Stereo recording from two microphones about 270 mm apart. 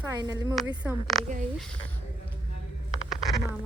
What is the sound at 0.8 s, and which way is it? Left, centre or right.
Speech, centre.